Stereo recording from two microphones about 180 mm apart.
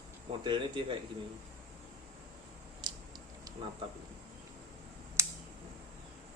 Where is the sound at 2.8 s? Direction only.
25° right (ahead or behind).